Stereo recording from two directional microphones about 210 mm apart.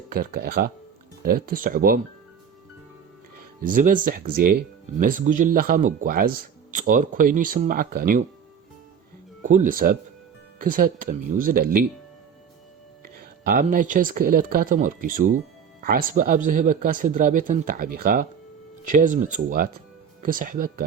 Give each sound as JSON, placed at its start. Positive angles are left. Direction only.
{"t": 0.1, "sound": "speech", "side_deg": -45}
{"t": 3.6, "sound": "speech", "side_deg": -40}
{"t": 9.4, "sound": "speech", "side_deg": -35}
{"t": 13.1, "sound": "speech", "side_deg": -45}